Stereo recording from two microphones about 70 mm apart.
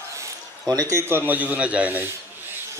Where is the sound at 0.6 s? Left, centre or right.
Right.